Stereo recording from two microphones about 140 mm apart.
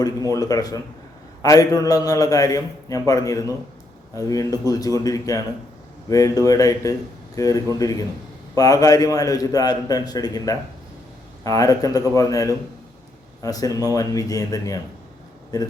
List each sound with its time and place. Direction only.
0.0 s a man's voice: 25° left (ahead or behind)